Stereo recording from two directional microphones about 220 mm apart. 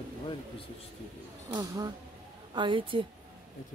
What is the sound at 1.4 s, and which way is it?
A woman's voice, 15° right (ahead or behind).